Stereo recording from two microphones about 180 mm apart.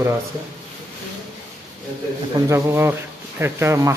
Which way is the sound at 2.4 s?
15° right (ahead or behind).